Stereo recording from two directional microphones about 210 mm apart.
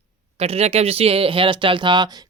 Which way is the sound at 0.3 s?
30° right (ahead or behind).